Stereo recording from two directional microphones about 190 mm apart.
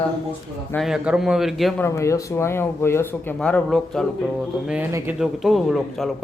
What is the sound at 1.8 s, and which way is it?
Speech, 15° left (ahead or behind).